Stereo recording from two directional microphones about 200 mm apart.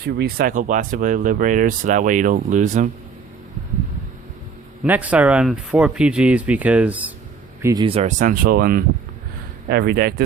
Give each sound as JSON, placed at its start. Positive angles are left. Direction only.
{"t": 0.0, "sound": "speech", "side_deg": -55}
{"t": 4.8, "sound": "speech", "side_deg": -5}
{"t": 7.6, "sound": "speech", "side_deg": -20}